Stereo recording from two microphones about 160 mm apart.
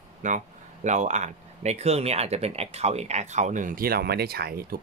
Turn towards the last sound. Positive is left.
turn(degrees=-75)  # may be behind; listen again after turning